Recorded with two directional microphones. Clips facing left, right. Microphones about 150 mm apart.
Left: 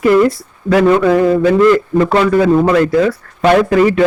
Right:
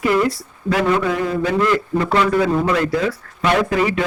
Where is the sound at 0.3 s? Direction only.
50° left (ahead or behind).